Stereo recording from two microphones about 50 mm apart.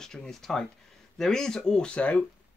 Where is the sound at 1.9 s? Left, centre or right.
Left.